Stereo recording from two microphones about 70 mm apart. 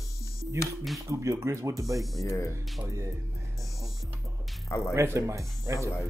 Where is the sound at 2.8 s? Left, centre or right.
Right.